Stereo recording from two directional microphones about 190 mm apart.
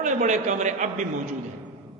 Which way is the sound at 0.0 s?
40° right (ahead or behind).